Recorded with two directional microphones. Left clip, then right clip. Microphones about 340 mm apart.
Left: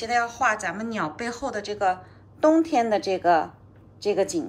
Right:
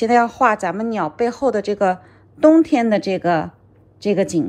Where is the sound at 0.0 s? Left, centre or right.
Centre.